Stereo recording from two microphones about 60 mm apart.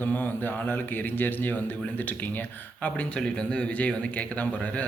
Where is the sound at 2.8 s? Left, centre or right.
Centre.